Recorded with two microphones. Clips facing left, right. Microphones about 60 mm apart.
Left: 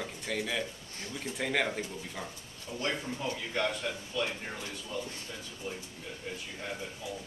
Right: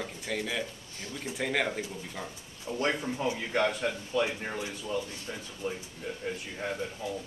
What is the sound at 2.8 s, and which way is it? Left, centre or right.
Speech, right.